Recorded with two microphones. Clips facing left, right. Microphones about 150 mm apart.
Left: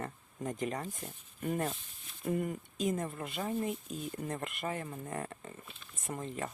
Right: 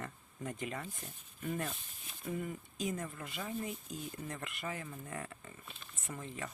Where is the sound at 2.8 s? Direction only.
45° left (ahead or behind).